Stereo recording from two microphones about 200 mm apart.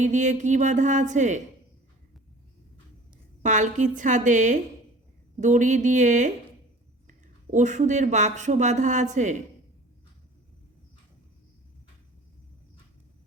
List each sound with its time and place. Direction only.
0.0 s speech: 35° right (ahead or behind)
3.4 s speech: 40° right (ahead or behind)